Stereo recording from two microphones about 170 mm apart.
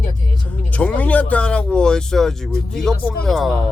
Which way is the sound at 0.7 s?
10° left (ahead or behind).